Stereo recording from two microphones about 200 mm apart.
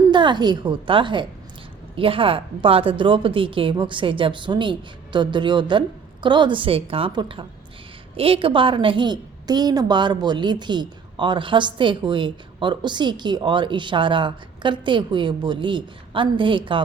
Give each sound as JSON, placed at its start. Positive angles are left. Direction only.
{"t": 0.1, "sound": "a woman's voice", "side_deg": -25}